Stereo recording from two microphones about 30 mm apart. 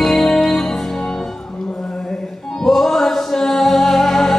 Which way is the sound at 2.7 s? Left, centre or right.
Centre.